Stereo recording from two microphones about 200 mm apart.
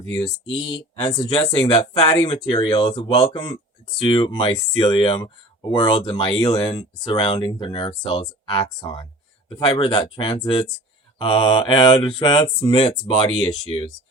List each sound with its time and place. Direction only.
0.1 s speech: 25° left (ahead or behind)